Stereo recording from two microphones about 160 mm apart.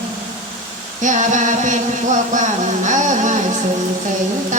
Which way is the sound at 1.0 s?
50° right (ahead or behind).